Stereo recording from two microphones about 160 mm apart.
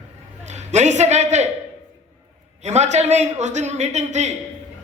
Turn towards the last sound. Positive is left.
turn(degrees=-45)  # may be behind; listen again after turning